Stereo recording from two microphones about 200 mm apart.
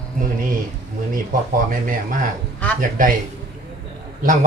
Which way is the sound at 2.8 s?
40° right (ahead or behind).